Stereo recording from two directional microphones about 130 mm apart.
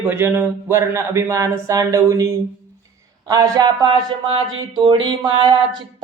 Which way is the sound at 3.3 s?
30° right (ahead or behind).